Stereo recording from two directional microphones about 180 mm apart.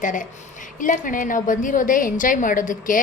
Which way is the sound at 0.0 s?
45° left (ahead or behind).